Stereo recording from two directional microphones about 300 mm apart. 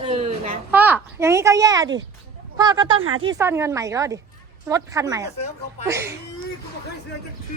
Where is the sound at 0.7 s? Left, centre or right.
Centre.